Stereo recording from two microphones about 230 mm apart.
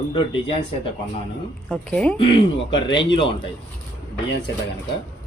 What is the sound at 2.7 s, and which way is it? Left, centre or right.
Speech, centre.